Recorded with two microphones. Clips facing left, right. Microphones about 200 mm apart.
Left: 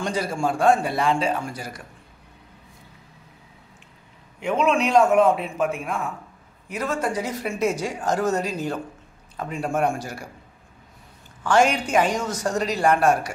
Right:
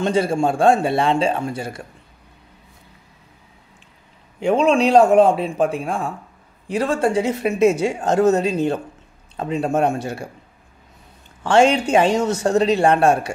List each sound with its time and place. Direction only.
0.0 s speech: 25° right (ahead or behind)
4.4 s a man's voice: 30° right (ahead or behind)
11.4 s speech: 25° right (ahead or behind)